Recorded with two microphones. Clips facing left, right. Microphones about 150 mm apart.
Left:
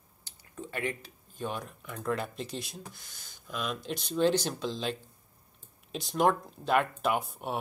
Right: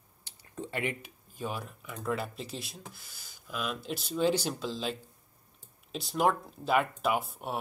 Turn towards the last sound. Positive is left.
turn(degrees=0)  # may be behind; listen again after turning